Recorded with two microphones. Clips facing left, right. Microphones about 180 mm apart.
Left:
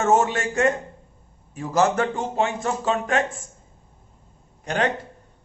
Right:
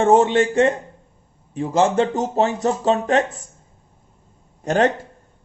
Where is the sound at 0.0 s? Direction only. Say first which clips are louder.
Right 6 dB; 30° right (ahead or behind).